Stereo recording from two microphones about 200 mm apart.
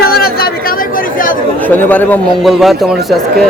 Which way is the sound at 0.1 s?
50° left (ahead or behind).